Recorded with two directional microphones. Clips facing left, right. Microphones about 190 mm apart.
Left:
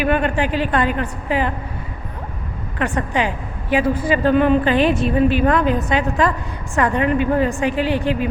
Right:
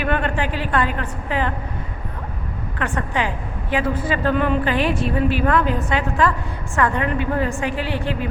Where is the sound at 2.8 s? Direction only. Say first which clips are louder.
Left 3 dB; 15° left (ahead or behind).